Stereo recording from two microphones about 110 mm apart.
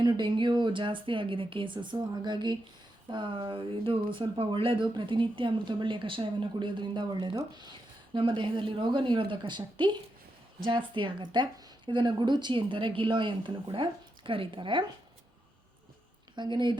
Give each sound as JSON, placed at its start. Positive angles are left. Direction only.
{"t": 0.0, "sound": "speech", "side_deg": -45}
{"t": 16.3, "sound": "speech", "side_deg": -45}